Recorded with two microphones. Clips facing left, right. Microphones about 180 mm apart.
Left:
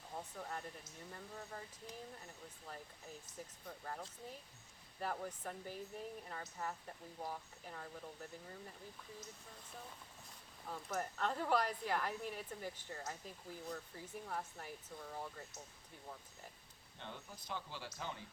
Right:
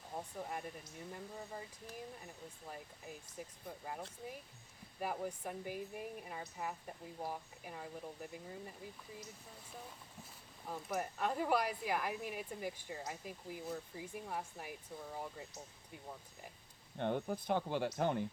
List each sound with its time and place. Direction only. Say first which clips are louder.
0.2 s speech: right 3 dB; 15° right (ahead or behind)
10.7 s speech: right 2 dB; 10° right (ahead or behind)
17.0 s speech: right 15 dB; 55° right (ahead or behind)